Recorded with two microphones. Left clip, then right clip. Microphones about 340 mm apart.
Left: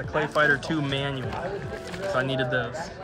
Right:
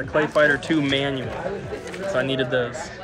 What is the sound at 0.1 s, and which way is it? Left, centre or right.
Speech, centre.